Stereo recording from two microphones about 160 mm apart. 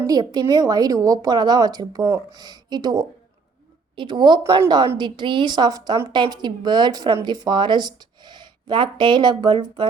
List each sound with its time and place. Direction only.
0.1 s a woman's voice: 25° right (ahead or behind)